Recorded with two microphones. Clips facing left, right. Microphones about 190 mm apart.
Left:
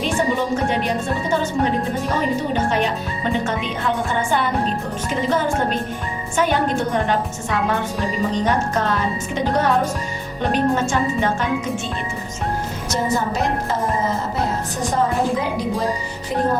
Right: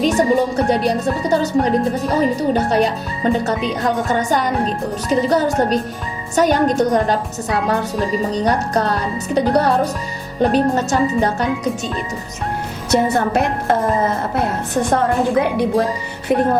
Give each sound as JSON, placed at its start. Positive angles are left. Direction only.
{"t": 0.0, "sound": "speech", "side_deg": -40}
{"t": 12.9, "sound": "music", "side_deg": -60}